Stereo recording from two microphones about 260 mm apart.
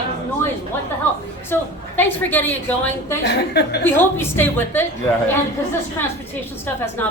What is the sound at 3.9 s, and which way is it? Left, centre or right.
A woman's voice, centre.